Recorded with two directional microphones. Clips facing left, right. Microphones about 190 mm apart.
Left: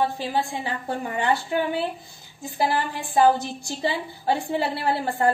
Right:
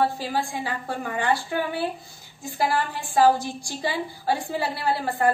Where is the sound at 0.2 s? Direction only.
20° left (ahead or behind).